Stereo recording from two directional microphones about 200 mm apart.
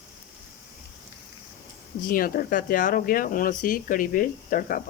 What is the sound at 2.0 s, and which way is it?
Speech, 45° left (ahead or behind).